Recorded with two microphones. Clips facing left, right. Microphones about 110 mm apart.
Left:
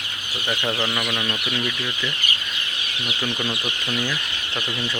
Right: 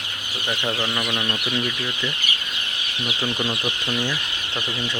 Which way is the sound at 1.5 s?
20° right (ahead or behind).